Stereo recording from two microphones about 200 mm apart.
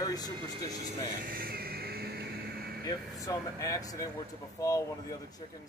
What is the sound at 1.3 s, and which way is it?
Vehicle, 50° right (ahead or behind).